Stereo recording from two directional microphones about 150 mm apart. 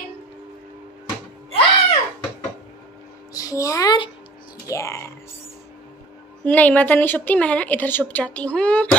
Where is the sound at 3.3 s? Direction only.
20° left (ahead or behind).